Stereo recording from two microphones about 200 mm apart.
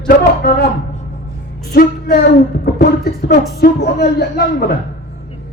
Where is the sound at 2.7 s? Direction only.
55° left (ahead or behind).